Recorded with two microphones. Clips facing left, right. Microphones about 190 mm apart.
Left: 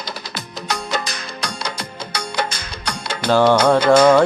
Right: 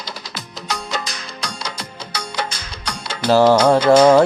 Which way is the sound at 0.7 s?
60° left (ahead or behind).